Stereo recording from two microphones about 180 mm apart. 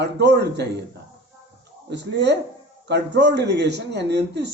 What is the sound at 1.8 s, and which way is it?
Speech, 75° right (ahead or behind).